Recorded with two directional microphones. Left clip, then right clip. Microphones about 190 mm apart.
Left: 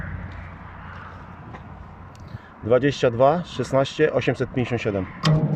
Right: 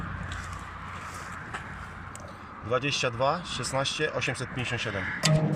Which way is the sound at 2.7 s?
35° left (ahead or behind).